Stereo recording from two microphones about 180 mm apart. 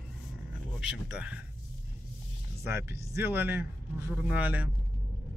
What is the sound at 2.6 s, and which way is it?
Speech, 15° right (ahead or behind).